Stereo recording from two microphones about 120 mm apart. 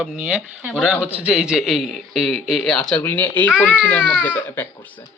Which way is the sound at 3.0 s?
15° left (ahead or behind).